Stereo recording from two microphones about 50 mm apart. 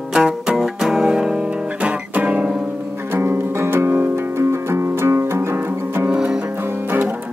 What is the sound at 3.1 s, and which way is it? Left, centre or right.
Music, right.